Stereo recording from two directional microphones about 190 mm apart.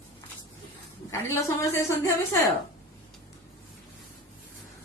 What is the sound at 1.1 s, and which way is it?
A woman's voice, 15° left (ahead or behind).